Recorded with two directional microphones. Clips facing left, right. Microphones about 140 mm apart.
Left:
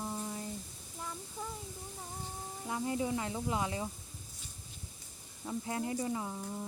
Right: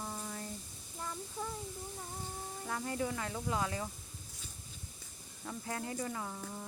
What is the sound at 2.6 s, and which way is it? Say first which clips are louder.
Speech: left 3 dB; 15° left (ahead or behind).